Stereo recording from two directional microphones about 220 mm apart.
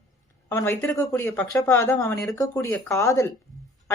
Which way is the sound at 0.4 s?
10° left (ahead or behind).